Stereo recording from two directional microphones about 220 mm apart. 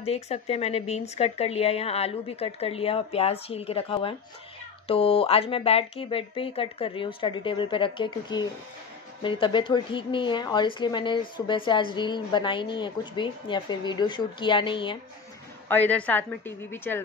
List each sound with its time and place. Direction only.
0.0 s a woman's voice: 30° left (ahead or behind)
15.7 s a woman's voice: 5° left (ahead or behind)